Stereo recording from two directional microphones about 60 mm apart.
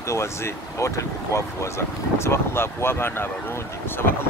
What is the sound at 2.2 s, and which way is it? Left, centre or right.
Speech, left.